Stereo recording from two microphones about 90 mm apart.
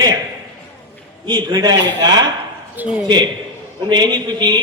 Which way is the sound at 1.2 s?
55° right (ahead or behind).